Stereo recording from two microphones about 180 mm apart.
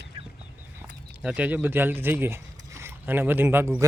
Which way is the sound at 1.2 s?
5° right (ahead or behind).